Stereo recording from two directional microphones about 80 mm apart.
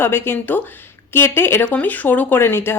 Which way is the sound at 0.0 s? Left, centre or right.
Left.